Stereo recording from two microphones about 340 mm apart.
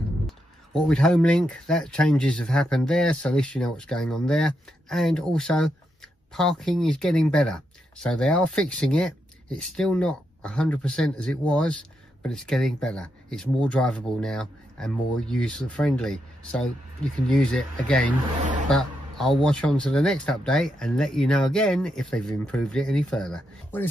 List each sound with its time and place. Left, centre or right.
0.7 s speech: centre